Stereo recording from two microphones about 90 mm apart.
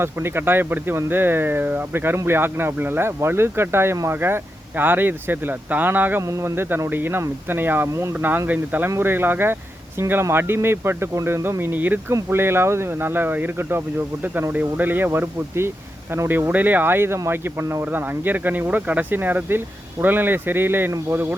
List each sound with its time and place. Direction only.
0.0 s speech: 25° right (ahead or behind)
6.2 s speech: 30° right (ahead or behind)